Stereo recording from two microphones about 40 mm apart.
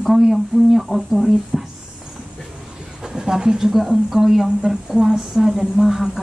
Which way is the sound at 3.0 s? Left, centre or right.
Centre.